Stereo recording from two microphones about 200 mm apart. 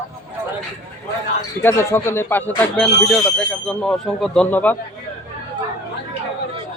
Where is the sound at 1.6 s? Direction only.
15° left (ahead or behind).